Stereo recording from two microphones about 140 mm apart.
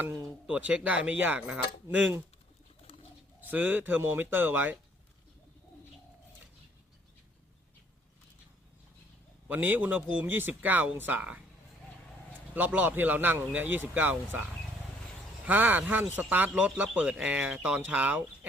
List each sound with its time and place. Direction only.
0.0 s a sound: 20° right (ahead or behind)
0.4 s speech: 10° right (ahead or behind)
3.4 s speech: 10° right (ahead or behind)
9.5 s speech: 10° right (ahead or behind)
15.4 s speech: 15° right (ahead or behind)